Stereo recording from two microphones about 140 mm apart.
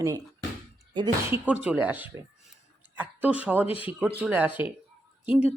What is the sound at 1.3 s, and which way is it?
Speech, 10° right (ahead or behind).